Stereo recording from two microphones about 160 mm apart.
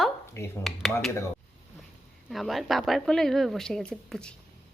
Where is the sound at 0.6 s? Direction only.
Centre (ahead or behind).